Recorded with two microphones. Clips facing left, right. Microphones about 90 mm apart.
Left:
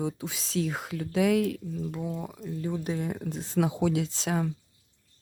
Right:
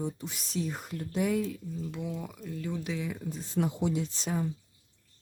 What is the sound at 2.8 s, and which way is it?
Speech, 45° left (ahead or behind).